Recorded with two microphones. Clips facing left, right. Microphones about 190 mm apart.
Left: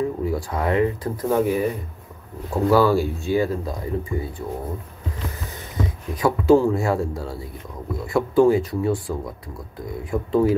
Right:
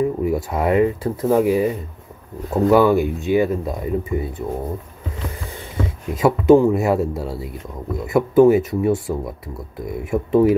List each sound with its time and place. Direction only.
0.3 s speech: 25° right (ahead or behind)
5.8 s speech: 25° right (ahead or behind)